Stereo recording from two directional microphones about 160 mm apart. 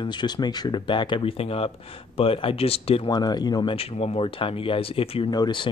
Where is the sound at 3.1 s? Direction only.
25° left (ahead or behind).